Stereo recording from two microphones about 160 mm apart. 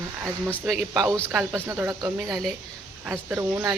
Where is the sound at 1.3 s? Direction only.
10° right (ahead or behind).